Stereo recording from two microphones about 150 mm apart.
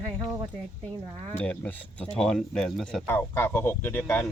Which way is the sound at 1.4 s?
10° left (ahead or behind).